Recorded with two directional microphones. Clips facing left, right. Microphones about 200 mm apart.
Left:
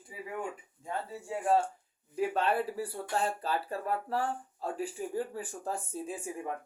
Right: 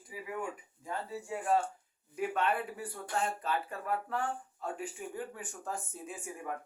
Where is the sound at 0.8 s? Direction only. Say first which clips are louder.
Left 1 dB; 30° left (ahead or behind).